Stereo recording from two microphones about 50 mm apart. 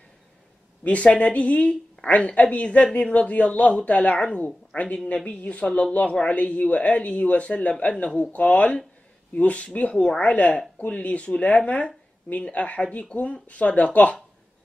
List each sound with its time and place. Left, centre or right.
0.8 s a woman's voice: left